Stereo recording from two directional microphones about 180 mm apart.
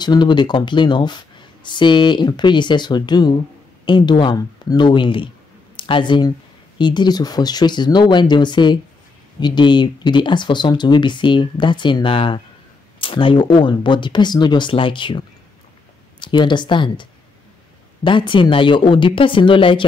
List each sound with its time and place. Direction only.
0.0 s speech: 25° left (ahead or behind)